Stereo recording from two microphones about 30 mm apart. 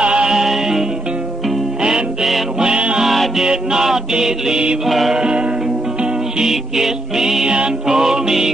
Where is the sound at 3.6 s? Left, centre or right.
Centre.